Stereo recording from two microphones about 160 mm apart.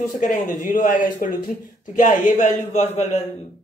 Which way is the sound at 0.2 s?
50° left (ahead or behind).